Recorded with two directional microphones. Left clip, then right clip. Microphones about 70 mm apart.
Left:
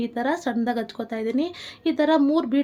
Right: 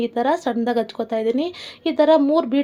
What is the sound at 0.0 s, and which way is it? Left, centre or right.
A woman's voice, right.